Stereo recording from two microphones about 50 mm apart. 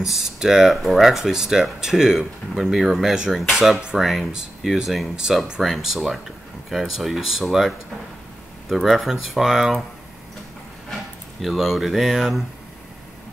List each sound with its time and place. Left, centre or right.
0.0 s speech: centre
3.5 s speech: centre
4.0 s speech: centre
11.4 s speech: centre